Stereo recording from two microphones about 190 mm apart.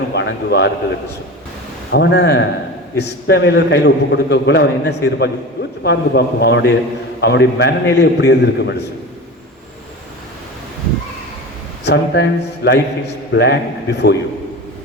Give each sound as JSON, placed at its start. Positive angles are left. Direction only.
{"t": 0.1, "sound": "a man's voice", "side_deg": 60}
{"t": 1.9, "sound": "a man's voice", "side_deg": 65}
{"t": 11.9, "sound": "a man's voice", "side_deg": 65}